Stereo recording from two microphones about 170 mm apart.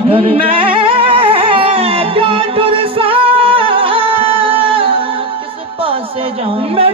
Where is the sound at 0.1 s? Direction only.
35° right (ahead or behind).